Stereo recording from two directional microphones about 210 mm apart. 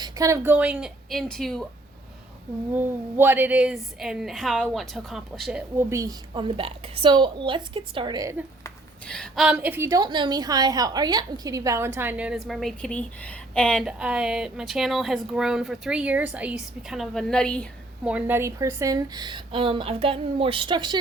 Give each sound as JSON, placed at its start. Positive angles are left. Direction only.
{"t": 0.0, "sound": "a woman's voice", "side_deg": -15}
{"t": 2.7, "sound": "a woman's voice", "side_deg": -10}
{"t": 8.6, "sound": "a woman's voice", "side_deg": 5}
{"t": 18.1, "sound": "a woman's voice", "side_deg": -10}